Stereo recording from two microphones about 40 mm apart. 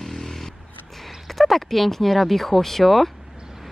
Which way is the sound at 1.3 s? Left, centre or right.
Centre.